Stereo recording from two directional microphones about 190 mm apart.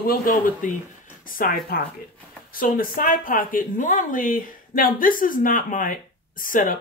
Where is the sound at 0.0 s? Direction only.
50° left (ahead or behind).